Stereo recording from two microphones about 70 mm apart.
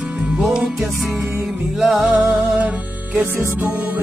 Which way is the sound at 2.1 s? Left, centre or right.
Right.